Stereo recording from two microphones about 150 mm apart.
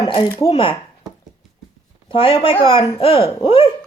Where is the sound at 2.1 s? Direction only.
35° left (ahead or behind).